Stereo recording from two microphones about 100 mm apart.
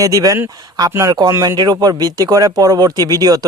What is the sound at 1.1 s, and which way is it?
Speech, 45° right (ahead or behind).